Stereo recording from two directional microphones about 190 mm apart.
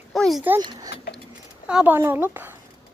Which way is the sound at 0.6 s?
20° right (ahead or behind).